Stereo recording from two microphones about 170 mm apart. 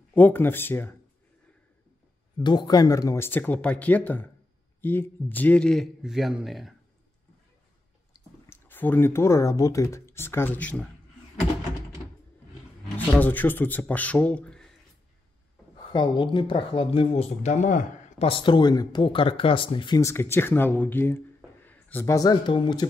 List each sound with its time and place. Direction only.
0.1 s speech: 10° left (ahead or behind)
2.3 s a man's voice: 25° left (ahead or behind); by 6.7 s centre (ahead or behind)
8.1 s speech: 15° left (ahead or behind)
12.9 s speech: 10° left (ahead or behind)
15.9 s speech: 25° left (ahead or behind)
20.0 s speech: 15° left (ahead or behind)